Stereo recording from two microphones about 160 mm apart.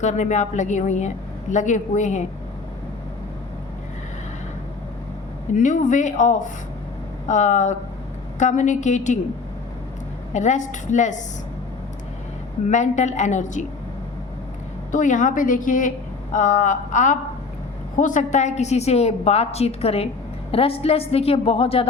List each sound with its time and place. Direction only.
0.0 s a woman's voice: 50° left (ahead or behind)
5.5 s a woman's voice: 50° left (ahead or behind)
10.3 s a woman's voice: 50° left (ahead or behind)
12.6 s a woman's voice: 50° left (ahead or behind)
14.9 s a woman's voice: 50° left (ahead or behind)